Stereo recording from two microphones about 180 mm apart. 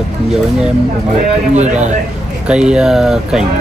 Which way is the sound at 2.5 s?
5° right (ahead or behind).